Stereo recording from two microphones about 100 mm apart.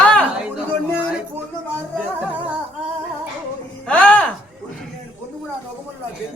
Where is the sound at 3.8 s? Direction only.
10° left (ahead or behind).